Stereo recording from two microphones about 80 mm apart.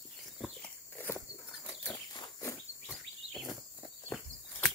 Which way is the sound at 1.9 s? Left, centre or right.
Left.